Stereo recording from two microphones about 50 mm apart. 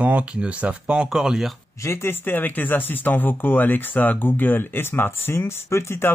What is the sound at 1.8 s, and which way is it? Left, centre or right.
Speech, left.